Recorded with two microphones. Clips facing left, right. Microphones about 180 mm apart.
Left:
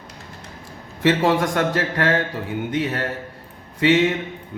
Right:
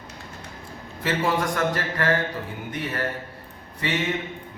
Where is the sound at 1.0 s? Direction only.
80° left.